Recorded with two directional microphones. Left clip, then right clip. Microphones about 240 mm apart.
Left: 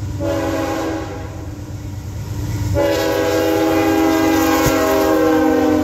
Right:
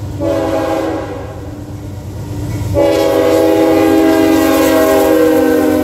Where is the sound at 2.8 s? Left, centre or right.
Centre; by 5.3 s right.